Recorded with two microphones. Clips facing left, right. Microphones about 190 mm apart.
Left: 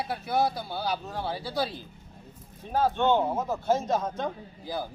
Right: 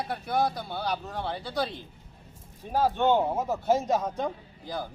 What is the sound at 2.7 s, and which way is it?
Speech, 15° right (ahead or behind).